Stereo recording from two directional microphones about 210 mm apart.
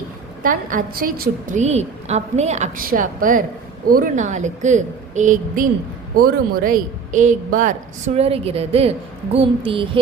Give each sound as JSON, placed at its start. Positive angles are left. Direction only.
{"t": 0.4, "sound": "a woman's voice", "side_deg": -40}